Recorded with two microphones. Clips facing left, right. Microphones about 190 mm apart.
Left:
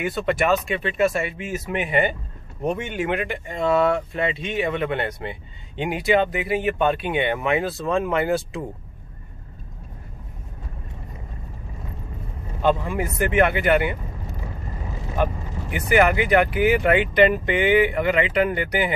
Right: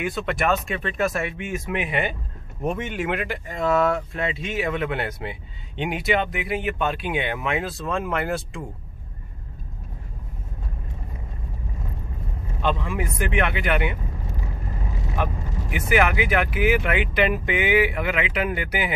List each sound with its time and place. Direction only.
0.0 s speech: centre (ahead or behind)
12.6 s speech: 40° left (ahead or behind)
13.6 s speech: centre (ahead or behind)
15.7 s speech: 5° right (ahead or behind)